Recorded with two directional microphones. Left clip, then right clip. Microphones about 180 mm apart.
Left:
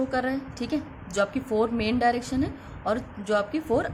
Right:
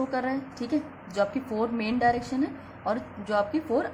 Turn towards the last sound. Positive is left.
turn(degrees=30)  # may be behind; listen again after turning